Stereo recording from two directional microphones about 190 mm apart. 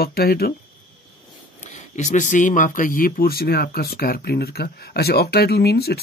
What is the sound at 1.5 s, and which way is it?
Speech, 40° left (ahead or behind).